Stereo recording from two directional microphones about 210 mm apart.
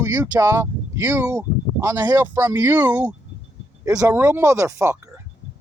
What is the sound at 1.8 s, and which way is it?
Speech, 20° right (ahead or behind).